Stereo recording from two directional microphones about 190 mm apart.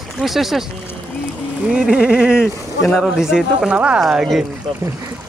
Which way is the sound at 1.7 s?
5° right (ahead or behind).